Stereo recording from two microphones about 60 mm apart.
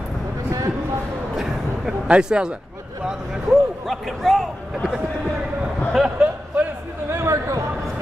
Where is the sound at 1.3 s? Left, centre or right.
Centre.